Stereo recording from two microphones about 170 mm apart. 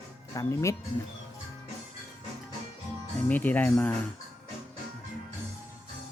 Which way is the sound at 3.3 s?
10° left (ahead or behind).